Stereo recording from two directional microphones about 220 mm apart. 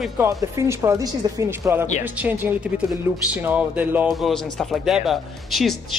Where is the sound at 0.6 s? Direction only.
15° right (ahead or behind).